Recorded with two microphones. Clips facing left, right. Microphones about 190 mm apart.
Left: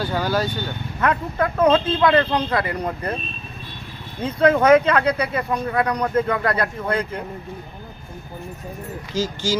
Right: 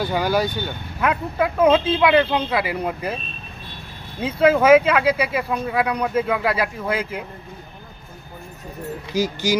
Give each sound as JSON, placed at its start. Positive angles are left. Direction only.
{"t": 0.0, "sound": "speech", "side_deg": -10}
{"t": 4.2, "sound": "speech", "side_deg": -5}
{"t": 9.1, "sound": "speech", "side_deg": -15}